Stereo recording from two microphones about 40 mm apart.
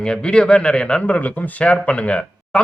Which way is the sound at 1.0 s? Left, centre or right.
Left.